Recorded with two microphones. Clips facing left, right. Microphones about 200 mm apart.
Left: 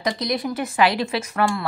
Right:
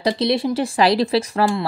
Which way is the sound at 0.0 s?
30° right (ahead or behind).